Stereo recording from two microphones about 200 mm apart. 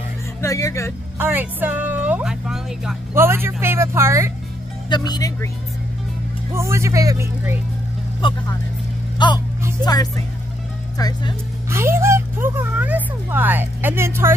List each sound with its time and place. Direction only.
0.4 s speech: 15° left (ahead or behind)
1.1 s speech: 10° right (ahead or behind)
4.8 s speech: 20° left (ahead or behind)
6.5 s speech: 15° right (ahead or behind)
8.2 s speech: 25° left (ahead or behind)
9.8 s speech: 10° right (ahead or behind)
11.0 s speech: 20° left (ahead or behind)
11.7 s speech: 10° right (ahead or behind)